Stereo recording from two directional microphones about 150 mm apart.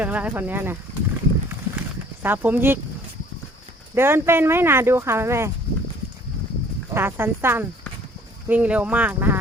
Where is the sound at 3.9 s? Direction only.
15° right (ahead or behind).